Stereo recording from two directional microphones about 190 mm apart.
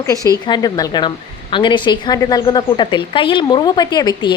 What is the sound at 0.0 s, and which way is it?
A woman's voice, 15° left (ahead or behind).